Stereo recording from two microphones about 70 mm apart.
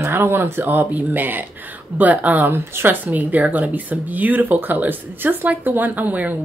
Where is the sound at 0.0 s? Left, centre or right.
Right.